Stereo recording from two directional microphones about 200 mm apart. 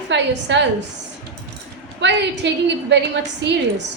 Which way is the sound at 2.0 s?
60° right (ahead or behind).